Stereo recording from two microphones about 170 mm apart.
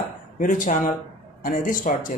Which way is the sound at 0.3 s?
50° left (ahead or behind).